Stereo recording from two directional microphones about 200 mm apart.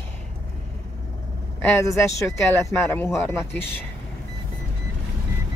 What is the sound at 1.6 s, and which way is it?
Speech, 15° left (ahead or behind).